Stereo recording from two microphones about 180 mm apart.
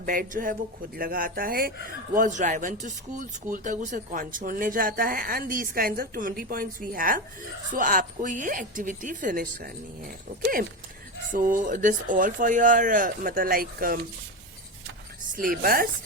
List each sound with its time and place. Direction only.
0.0 s speech: 50° right (ahead or behind)
2.1 s speech: 45° right (ahead or behind)
15.4 s speech: 55° right (ahead or behind)